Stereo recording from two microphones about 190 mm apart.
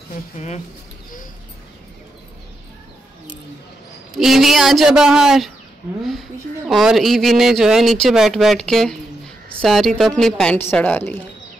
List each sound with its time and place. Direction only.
0.1 s speech: 35° left (ahead or behind)
4.2 s speech: centre (ahead or behind)
6.7 s speech: centre (ahead or behind)